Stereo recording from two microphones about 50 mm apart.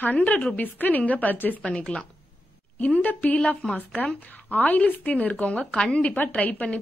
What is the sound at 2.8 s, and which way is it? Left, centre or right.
A woman's voice, left.